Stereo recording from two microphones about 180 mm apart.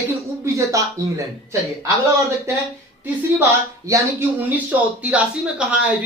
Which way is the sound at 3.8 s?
15° right (ahead or behind).